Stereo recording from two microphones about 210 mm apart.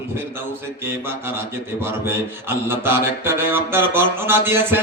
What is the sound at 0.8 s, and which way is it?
Mantra, 10° right (ahead or behind).